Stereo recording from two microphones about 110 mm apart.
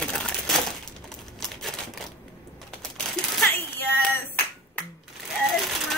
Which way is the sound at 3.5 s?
20° left (ahead or behind).